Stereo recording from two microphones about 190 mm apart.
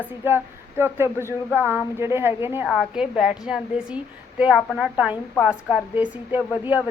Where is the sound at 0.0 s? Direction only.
10° right (ahead or behind).